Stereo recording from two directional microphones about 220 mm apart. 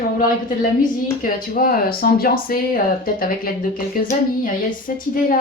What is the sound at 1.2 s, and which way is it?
Speech, 40° left (ahead or behind).